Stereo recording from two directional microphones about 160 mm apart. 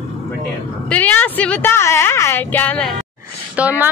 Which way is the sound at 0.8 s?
10° left (ahead or behind).